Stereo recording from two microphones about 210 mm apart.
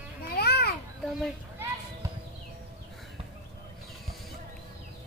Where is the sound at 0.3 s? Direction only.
50° left (ahead or behind).